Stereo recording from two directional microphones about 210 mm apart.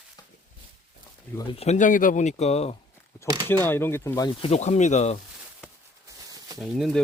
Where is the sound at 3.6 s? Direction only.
10° left (ahead or behind); by 5.2 s 35° left (ahead or behind).